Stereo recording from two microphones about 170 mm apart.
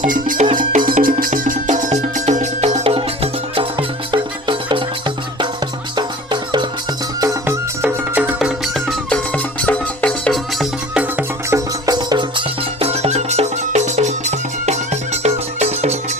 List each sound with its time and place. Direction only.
0.0 s music: 50° right (ahead or behind); by 11.6 s 10° right (ahead or behind)
11.9 s music: 25° right (ahead or behind)
12.8 s music: 40° right (ahead or behind)